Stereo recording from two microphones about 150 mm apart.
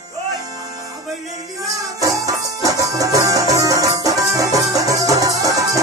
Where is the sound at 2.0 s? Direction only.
25° right (ahead or behind).